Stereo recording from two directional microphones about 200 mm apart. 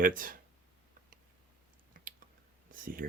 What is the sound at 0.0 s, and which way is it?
Speech, 45° right (ahead or behind).